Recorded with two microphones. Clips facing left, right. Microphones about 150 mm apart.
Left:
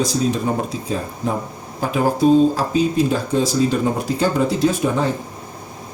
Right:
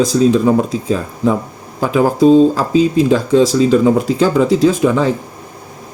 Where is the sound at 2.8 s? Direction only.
90° right.